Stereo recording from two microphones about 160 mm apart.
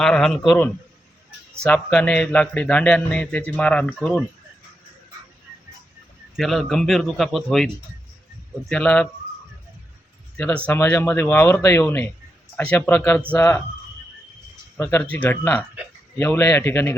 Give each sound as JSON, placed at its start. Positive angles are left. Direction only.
{"t": 0.0, "sound": "a man's voice", "side_deg": 5}
{"t": 6.3, "sound": "a man's voice", "side_deg": 0}
{"t": 8.7, "sound": "a man's voice", "side_deg": 5}
{"t": 10.3, "sound": "a man's voice", "side_deg": 10}
{"t": 14.8, "sound": "a man's voice", "side_deg": 15}